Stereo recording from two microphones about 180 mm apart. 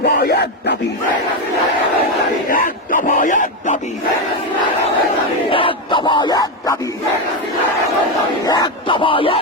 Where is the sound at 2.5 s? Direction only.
50° left (ahead or behind).